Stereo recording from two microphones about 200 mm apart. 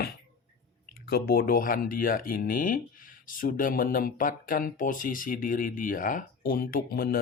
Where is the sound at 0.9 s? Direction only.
50° left (ahead or behind).